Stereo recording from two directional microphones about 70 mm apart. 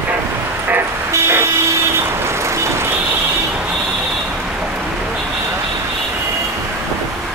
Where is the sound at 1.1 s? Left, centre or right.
Right.